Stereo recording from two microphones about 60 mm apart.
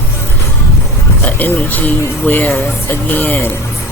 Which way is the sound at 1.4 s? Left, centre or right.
Left.